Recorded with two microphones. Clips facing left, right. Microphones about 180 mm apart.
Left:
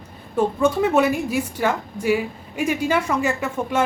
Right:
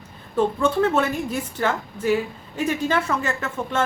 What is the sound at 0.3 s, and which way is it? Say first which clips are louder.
A woman's voice: left 1 dB; 10° left (ahead or behind).